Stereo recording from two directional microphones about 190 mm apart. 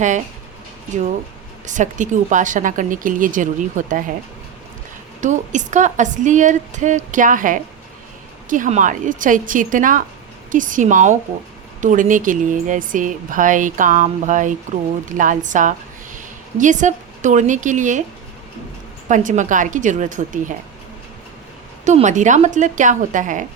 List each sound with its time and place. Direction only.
1.6 s a woman's voice: 40° right (ahead or behind)
5.2 s a woman's voice: 40° right (ahead or behind)
19.0 s a woman's voice: 40° right (ahead or behind)
21.8 s a woman's voice: 40° right (ahead or behind)